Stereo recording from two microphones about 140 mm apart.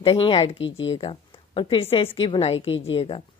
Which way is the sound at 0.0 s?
40° left (ahead or behind).